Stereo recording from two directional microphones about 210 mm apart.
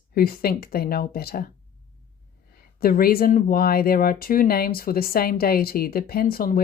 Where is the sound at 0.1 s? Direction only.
45° left (ahead or behind).